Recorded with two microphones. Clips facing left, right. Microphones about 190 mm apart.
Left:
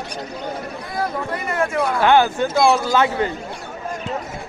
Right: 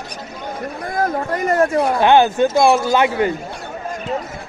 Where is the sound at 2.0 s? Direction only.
20° right (ahead or behind).